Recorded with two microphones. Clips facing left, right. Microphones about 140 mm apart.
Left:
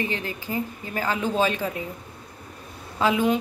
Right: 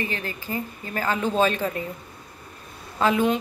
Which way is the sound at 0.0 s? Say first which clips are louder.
Left 1 dB; 15° left (ahead or behind).